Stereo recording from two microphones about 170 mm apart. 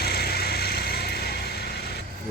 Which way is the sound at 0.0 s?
70° left (ahead or behind).